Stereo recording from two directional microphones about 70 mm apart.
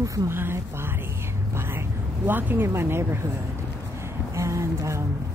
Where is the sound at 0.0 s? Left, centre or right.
Right.